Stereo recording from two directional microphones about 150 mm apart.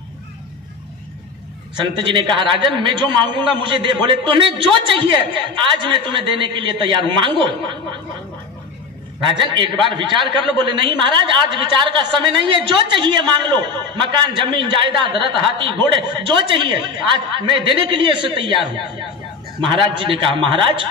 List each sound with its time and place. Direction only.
1.8 s a man's voice: 30° right (ahead or behind)
9.2 s a man's voice: 30° right (ahead or behind)